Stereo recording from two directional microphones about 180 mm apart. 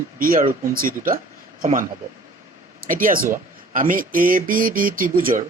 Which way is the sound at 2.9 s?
50° right (ahead or behind).